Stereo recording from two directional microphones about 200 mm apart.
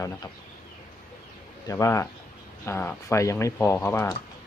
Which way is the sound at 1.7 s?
15° left (ahead or behind).